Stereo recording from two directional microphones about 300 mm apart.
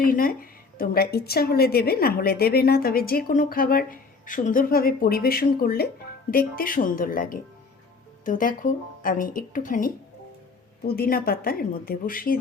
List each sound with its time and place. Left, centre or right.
0.0 s a woman's voice: left